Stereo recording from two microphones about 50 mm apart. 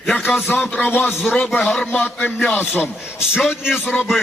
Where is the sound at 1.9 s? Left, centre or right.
Left.